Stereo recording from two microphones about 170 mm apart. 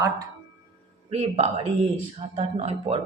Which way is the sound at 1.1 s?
40° right (ahead or behind).